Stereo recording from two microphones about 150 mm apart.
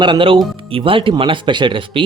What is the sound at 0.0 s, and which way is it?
Speech, 35° right (ahead or behind).